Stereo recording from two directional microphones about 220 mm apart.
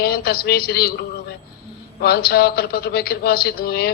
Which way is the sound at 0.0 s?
45° left (ahead or behind).